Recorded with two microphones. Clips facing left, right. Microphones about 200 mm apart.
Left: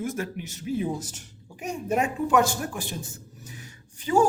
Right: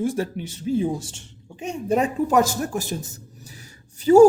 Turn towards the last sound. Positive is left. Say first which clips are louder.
# right 10 dB
turn(degrees=-40)  # may be behind; listen again after turning